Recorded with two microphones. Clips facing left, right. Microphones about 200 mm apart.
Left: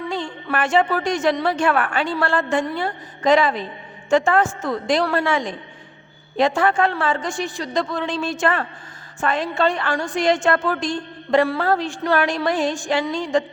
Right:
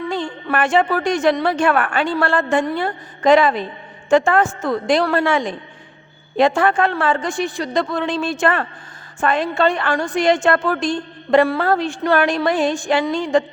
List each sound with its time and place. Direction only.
0.1 s a woman's voice: 55° right (ahead or behind)